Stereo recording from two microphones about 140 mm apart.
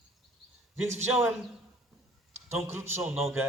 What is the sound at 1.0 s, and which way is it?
Speech, 15° right (ahead or behind).